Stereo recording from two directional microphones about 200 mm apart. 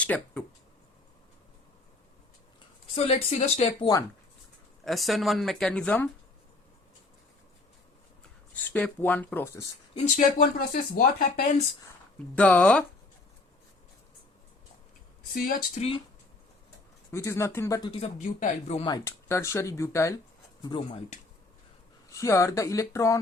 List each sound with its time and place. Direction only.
0.0 s speech: 5° left (ahead or behind)
2.9 s speech: 30° left (ahead or behind)
4.8 s speech: centre (ahead or behind)
8.6 s speech: 10° left (ahead or behind)
10.2 s speech: 40° left (ahead or behind)
12.4 s speech: 5° left (ahead or behind)
15.4 s speech: 35° left (ahead or behind)
17.1 s speech: 15° left (ahead or behind)
18.3 s speech: 35° left (ahead or behind)
18.9 s speech: 15° left (ahead or behind)
22.1 s speech: 15° left (ahead or behind)